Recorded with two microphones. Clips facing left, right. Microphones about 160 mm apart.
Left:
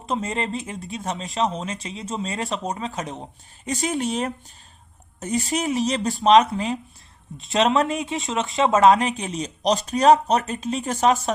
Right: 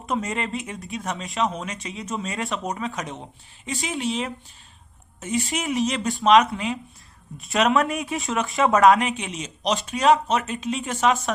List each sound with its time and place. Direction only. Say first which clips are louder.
0.0 s speech: left 1 dB; 30° left (ahead or behind)
3.7 s speech: left 3 dB; 45° left (ahead or behind)
7.3 s speech: left 1 dB; 25° left (ahead or behind)
9.0 s speech: left 2 dB; 40° left (ahead or behind)